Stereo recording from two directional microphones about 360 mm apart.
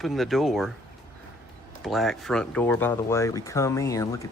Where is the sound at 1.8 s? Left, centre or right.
Centre.